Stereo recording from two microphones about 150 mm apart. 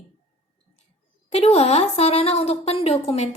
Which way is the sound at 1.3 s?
45° left (ahead or behind).